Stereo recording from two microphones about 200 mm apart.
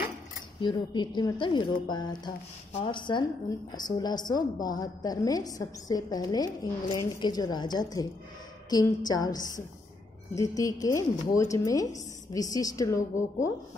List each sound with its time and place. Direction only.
0.6 s a woman's voice: 25° left (ahead or behind)